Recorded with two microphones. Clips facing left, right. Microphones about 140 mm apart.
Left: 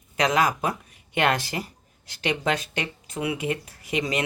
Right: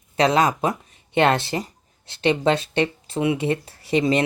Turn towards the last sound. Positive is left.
turn(degrees=-30)  # may be behind; listen again after turning